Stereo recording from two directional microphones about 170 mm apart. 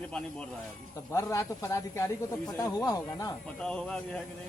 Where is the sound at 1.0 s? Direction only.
20° left (ahead or behind).